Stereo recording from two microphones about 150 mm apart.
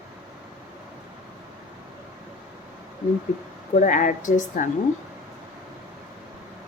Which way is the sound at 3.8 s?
60° left (ahead or behind).